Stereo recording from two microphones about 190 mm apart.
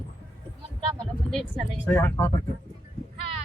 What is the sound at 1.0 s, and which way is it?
Speech, 5° left (ahead or behind).